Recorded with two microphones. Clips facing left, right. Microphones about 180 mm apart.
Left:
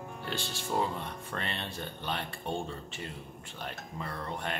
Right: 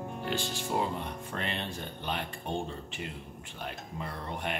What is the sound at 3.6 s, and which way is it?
Speech, 15° right (ahead or behind).